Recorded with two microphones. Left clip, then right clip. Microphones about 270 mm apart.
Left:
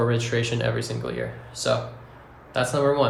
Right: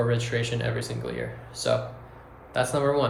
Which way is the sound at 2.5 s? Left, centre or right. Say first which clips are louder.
Left 2 dB; centre.